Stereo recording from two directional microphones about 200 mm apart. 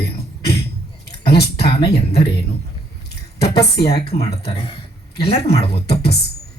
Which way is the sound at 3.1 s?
55° left (ahead or behind).